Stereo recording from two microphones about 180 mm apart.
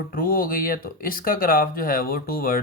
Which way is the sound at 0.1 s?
55° left (ahead or behind).